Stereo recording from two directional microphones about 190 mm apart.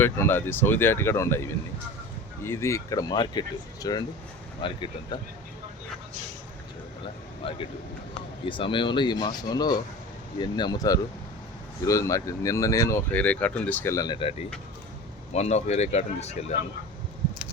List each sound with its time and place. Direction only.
0.0 s speech: 10° left (ahead or behind)
7.4 s speech: 30° left (ahead or behind)